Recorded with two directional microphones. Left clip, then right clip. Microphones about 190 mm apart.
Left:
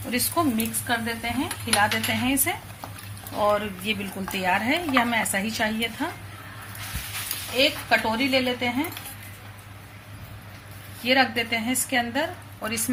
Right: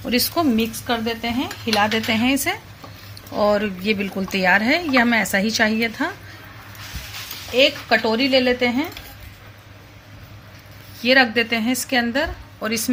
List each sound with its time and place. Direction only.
0.1 s speech: 55° right (ahead or behind)
7.9 s speech: 50° right (ahead or behind)
11.0 s speech: 50° right (ahead or behind)